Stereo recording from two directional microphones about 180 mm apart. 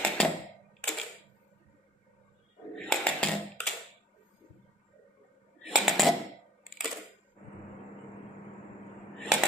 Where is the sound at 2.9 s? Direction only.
5° left (ahead or behind).